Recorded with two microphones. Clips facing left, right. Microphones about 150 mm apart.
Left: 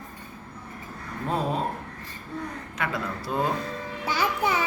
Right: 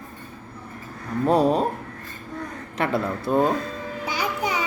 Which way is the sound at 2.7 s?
30° right (ahead or behind).